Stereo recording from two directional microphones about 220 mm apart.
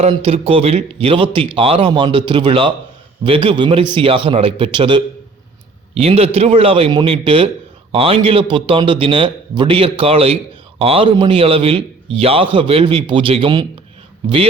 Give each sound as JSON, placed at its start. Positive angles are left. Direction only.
{"t": 0.0, "sound": "a man's voice", "side_deg": -25}